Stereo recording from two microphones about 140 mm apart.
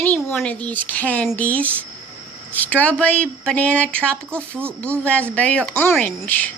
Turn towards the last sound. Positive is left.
turn(degrees=10)  # may be behind; listen again after turning